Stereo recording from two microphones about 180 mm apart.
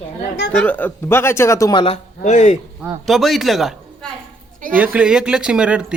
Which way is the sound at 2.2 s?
40° left (ahead or behind).